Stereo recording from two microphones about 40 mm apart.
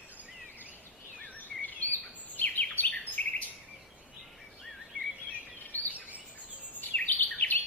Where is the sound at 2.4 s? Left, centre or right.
Left.